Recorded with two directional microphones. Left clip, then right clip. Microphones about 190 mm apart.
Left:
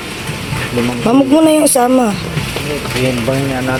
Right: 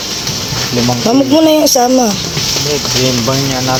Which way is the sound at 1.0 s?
5° left (ahead or behind).